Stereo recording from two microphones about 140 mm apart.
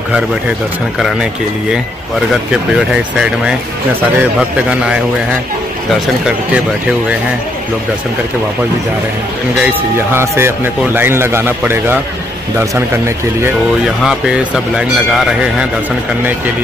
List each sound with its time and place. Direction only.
4.2 s a man's voice: 10° right (ahead or behind)
9.6 s a man's voice: 15° right (ahead or behind)
14.0 s a man's voice: 5° right (ahead or behind)